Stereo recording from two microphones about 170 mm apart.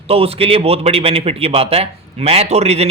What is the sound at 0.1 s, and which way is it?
A man's voice, 35° right (ahead or behind).